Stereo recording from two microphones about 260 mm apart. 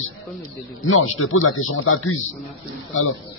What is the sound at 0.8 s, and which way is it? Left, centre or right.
A man's voice, left.